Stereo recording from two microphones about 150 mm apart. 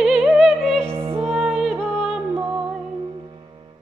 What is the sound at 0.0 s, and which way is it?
Music, centre (ahead or behind).